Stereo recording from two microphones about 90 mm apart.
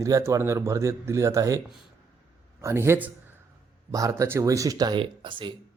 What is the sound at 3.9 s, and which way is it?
Speech, 35° right (ahead or behind).